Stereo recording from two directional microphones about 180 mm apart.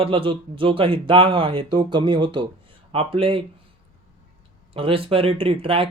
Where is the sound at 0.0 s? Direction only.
30° right (ahead or behind).